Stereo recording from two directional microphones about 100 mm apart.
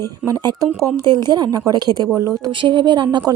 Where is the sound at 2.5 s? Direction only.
55° right (ahead or behind).